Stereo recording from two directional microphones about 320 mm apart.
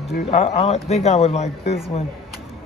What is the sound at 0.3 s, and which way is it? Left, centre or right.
Speech, centre.